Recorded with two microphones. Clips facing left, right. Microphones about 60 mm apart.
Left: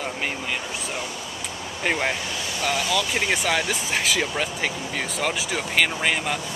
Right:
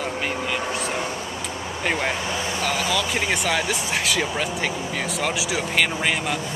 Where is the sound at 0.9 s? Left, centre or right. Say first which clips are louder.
Right 4 dB; right.